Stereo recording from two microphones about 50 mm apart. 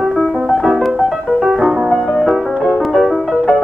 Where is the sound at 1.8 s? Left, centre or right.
Centre.